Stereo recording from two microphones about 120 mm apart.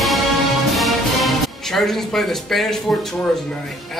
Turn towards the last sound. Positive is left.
turn(degrees=0)  # may be behind; listen again after turning